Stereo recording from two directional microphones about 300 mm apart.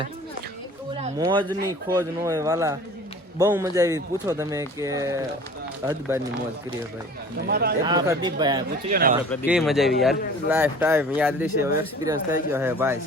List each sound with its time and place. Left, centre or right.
0.9 s a sound: centre
1.6 s speech: centre
7.4 s speech: right
7.9 s speech: centre
8.9 s speech: right
9.3 s speech: centre